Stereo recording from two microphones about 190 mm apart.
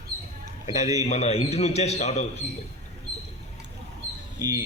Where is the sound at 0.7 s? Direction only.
20° right (ahead or behind).